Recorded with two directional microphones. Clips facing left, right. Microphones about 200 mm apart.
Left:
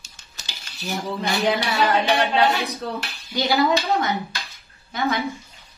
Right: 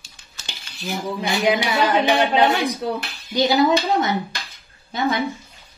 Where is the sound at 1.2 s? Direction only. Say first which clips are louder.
Right 3 dB; 10° right (ahead or behind).